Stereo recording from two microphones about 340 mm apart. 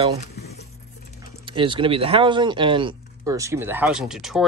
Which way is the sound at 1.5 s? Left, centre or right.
Centre.